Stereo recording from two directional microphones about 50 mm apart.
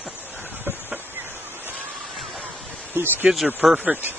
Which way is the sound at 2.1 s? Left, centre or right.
Centre.